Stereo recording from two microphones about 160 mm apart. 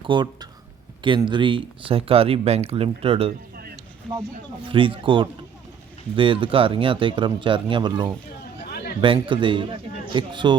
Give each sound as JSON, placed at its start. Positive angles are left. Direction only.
{"t": 0.0, "sound": "speech", "side_deg": -30}
{"t": 3.5, "sound": "a sound", "side_deg": -70}
{"t": 4.1, "sound": "speech", "side_deg": 0}
{"t": 4.6, "sound": "speech", "side_deg": -35}
{"t": 8.7, "sound": "chatter", "side_deg": 75}
{"t": 9.0, "sound": "speech", "side_deg": -30}